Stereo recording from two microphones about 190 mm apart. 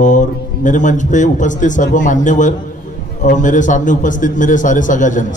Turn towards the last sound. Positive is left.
turn(degrees=40)  # may be behind; listen again after turning